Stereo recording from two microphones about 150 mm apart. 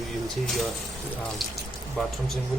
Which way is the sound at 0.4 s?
Centre (ahead or behind).